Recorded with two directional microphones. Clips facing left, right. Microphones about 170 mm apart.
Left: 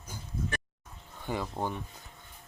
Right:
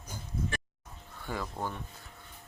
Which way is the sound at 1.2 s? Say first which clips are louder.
Left 3 dB; 20° left (ahead or behind).